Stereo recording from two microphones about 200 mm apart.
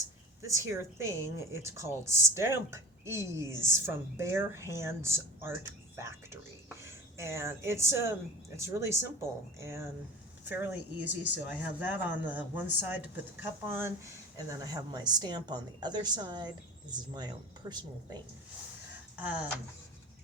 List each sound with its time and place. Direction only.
0.4 s a woman's voice: 15° right (ahead or behind)
19.1 s speech: 5° right (ahead or behind)